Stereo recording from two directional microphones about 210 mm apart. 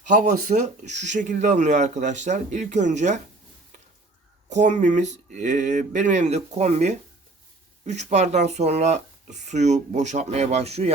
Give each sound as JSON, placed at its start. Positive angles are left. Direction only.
{"t": 0.1, "sound": "speech", "side_deg": -35}
{"t": 4.4, "sound": "speech", "side_deg": -35}